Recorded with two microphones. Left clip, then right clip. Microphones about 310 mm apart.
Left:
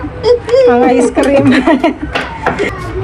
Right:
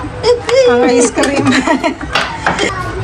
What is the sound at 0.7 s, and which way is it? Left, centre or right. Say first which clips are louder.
Speech: left 1 dB; centre.